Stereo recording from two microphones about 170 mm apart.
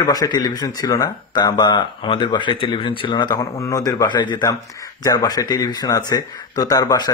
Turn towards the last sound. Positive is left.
turn(degrees=20)  # may be behind; listen again after turning